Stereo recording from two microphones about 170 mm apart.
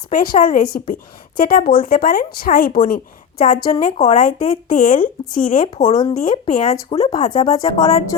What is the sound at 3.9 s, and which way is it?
Speech, 45° left (ahead or behind).